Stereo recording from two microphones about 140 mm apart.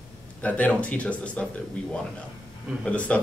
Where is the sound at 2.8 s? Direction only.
10° left (ahead or behind).